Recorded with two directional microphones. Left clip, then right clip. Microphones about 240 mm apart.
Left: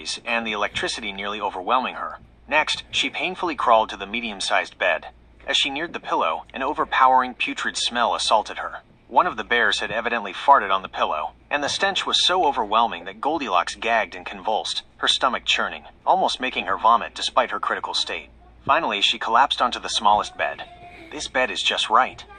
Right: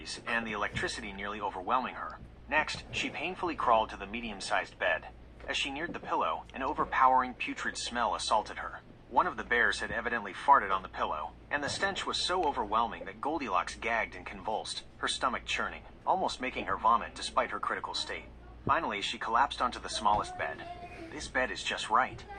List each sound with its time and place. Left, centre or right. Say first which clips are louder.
0.0 s speech: left 9 dB; left